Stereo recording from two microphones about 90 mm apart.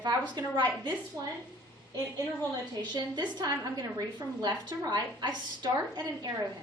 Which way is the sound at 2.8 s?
55° right (ahead or behind).